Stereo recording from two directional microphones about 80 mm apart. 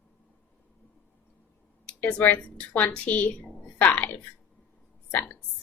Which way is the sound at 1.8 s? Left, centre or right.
Centre.